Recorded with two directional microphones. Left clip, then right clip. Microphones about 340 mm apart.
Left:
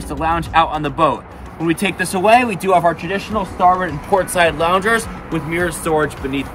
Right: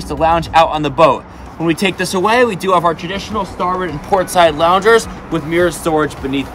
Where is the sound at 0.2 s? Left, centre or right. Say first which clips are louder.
Right 4 dB; right.